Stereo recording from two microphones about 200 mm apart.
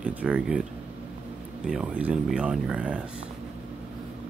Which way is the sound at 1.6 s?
5° right (ahead or behind).